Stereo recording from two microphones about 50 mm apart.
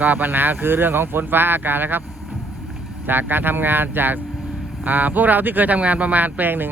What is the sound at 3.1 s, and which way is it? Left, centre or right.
Speech, right.